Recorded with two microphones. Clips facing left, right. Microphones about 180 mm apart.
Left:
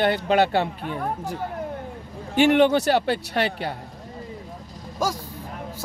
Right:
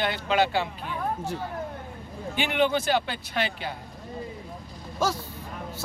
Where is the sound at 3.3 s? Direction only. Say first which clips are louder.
Left 3 dB; 50° left (ahead or behind).